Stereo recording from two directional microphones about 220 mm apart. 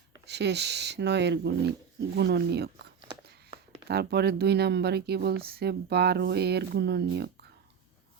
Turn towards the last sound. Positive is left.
turn(degrees=-50)  # may be behind; listen again after turning